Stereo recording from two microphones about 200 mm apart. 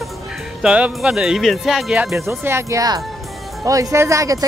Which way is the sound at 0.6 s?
5° right (ahead or behind).